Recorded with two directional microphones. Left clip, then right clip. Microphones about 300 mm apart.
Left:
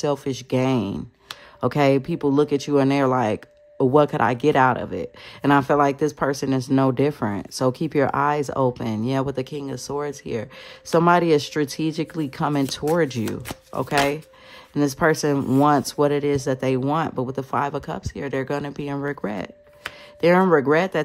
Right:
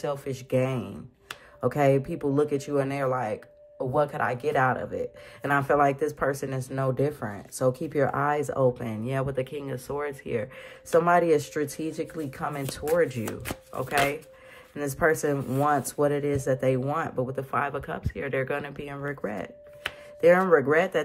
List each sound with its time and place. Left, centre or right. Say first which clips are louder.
0.0 s speech: left 7 dB; centre